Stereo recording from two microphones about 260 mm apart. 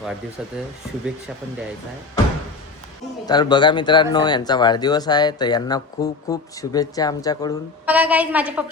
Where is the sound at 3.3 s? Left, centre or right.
Centre.